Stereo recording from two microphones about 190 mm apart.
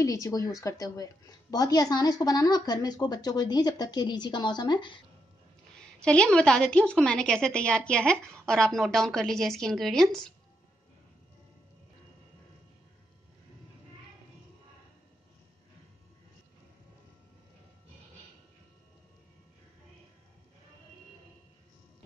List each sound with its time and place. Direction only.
0.0 s a woman's voice: 15° left (ahead or behind)
5.8 s a woman's voice: 5° left (ahead or behind)